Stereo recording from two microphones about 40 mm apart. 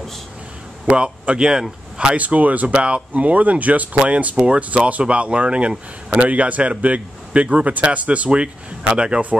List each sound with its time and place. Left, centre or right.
0.8 s speech: right
2.1 s a man's voice: right